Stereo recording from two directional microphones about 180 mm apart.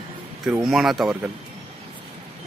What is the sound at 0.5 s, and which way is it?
Speech, centre (ahead or behind).